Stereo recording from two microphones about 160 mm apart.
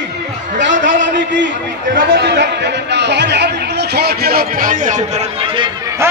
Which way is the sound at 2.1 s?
90° right.